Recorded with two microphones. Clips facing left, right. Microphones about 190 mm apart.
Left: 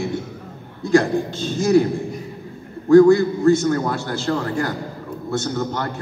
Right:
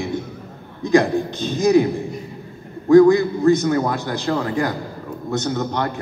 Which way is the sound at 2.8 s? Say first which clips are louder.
Even; 15° right (ahead or behind).